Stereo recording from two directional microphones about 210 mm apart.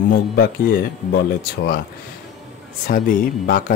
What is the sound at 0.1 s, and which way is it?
Speech, 45° left (ahead or behind).